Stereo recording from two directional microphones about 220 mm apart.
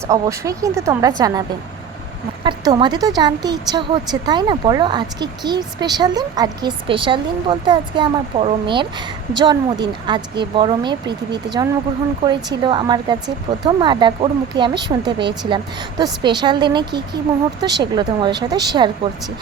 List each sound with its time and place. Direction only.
0.1 s a woman's voice: 15° right (ahead or behind)